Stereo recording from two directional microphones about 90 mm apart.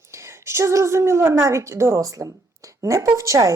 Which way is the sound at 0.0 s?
30° right (ahead or behind).